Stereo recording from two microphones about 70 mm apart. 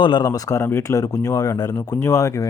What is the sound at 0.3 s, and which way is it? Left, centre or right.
Speech, left.